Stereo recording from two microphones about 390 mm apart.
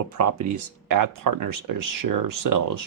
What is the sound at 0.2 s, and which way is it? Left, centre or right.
Speech, right.